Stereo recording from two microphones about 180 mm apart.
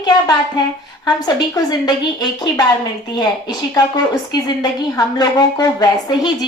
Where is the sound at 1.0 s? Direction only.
25° left (ahead or behind).